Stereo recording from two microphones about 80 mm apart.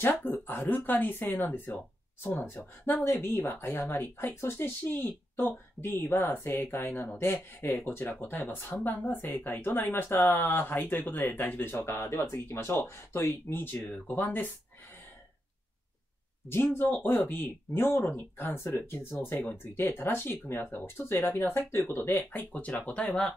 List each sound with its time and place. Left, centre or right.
0.0 s speech: left
16.4 s speech: left